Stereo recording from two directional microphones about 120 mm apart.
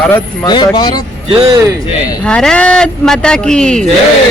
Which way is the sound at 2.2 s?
5° left (ahead or behind).